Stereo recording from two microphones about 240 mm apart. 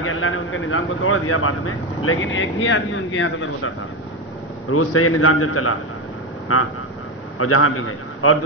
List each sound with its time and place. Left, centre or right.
0.0 s speech: left
4.6 s a man's voice: left